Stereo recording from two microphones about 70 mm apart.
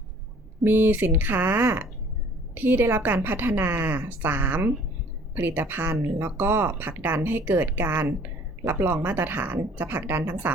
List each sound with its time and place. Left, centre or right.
0.6 s speech: right